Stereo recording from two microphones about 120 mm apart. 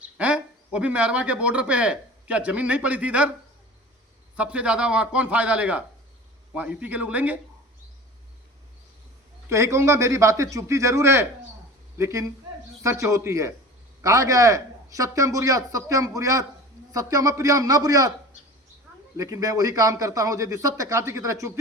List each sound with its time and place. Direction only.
0.0 s speech: 10° right (ahead or behind)
4.4 s a man's voice: 10° right (ahead or behind)
9.5 s a man's voice: 25° right (ahead or behind)
19.1 s a man's voice: 30° right (ahead or behind)